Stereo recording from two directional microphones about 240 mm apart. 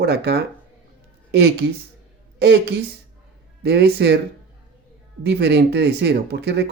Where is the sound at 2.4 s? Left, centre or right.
Right.